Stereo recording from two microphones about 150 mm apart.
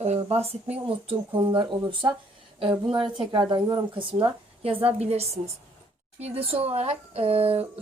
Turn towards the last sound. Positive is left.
turn(degrees=-40)  # may be behind; listen again after turning